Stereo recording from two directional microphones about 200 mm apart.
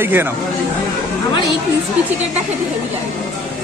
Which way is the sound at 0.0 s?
10° right (ahead or behind).